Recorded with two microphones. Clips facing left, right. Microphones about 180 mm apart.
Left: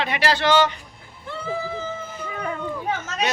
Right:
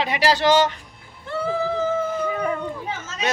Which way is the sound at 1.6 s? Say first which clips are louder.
Right 8 dB; 65° right (ahead or behind).